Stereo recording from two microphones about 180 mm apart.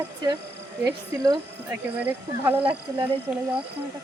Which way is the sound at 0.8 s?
20° right (ahead or behind).